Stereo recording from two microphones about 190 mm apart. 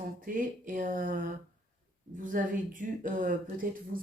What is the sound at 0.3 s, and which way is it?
Speech, 45° right (ahead or behind).